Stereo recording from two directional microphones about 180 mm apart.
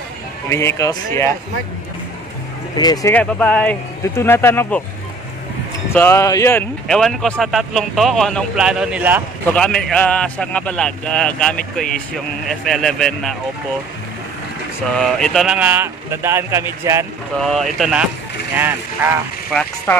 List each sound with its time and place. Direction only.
0.5 s speech: 15° left (ahead or behind)
2.8 s speech: 20° left (ahead or behind)
3.2 s speech: 10° left (ahead or behind)
5.9 s speech: 15° left (ahead or behind)
6.9 s a man's voice: centre (ahead or behind)
9.5 s a man's voice: 5° left (ahead or behind)
15.0 s speech: 5° left (ahead or behind); by 17.0 s 15° right (ahead or behind)
17.4 s a man's voice: centre (ahead or behind)
18.5 s speech: 10° right (ahead or behind)